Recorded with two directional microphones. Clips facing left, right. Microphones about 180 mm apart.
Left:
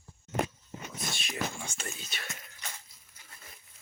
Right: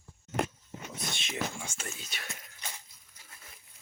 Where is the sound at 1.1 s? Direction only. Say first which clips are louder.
Right 1 dB; 20° right (ahead or behind).